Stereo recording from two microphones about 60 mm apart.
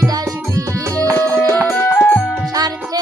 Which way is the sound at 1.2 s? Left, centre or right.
Right.